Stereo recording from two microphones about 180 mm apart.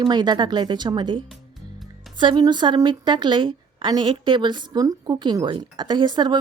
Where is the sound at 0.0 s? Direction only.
25° right (ahead or behind).